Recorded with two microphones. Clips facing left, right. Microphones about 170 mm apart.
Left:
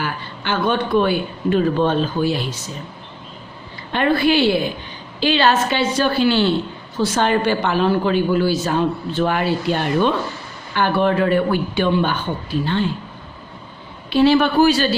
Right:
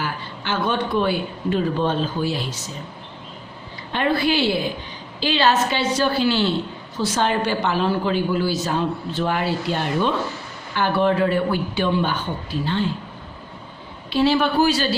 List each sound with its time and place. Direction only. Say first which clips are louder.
0.0 s speech: left 2 dB; 60° left (ahead or behind)
3.9 s a woman's voice: left 4 dB; 60° left (ahead or behind)
14.1 s a woman's voice: left 4 dB; 60° left (ahead or behind)